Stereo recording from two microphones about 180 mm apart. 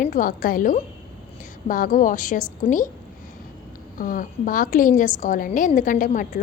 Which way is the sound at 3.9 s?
50° left (ahead or behind).